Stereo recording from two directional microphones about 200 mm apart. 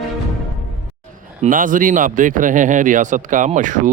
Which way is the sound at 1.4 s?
40° right (ahead or behind).